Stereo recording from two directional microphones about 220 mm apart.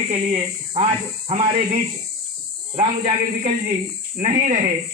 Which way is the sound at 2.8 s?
30° right (ahead or behind).